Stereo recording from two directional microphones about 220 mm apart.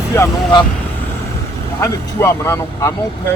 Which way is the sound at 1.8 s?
15° left (ahead or behind).